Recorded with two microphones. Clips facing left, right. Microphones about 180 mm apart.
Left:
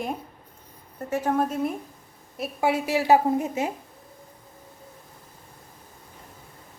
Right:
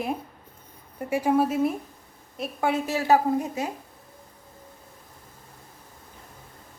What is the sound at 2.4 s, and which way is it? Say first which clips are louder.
A woman's voice: left 1 dB; 10° left (ahead or behind).